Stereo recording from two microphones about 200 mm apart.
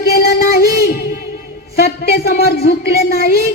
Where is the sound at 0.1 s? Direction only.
50° left (ahead or behind).